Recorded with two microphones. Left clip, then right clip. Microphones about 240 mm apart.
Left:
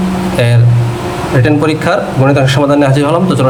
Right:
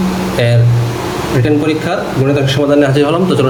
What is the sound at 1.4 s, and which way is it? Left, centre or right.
A man's voice, centre.